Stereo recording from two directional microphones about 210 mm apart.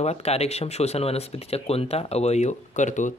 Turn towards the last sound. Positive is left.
turn(degrees=35)  # may be behind; listen again after turning